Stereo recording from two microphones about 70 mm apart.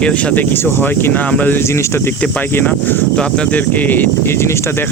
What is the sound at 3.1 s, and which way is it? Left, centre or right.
Speech, centre.